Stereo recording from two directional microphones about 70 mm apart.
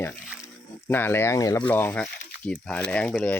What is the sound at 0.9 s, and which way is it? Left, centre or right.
Speech, left.